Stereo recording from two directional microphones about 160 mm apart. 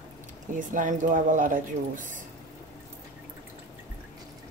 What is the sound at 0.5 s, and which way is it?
Speech, 55° right (ahead or behind).